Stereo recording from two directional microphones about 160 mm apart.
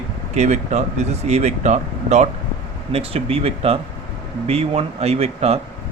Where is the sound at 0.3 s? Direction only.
45° right (ahead or behind).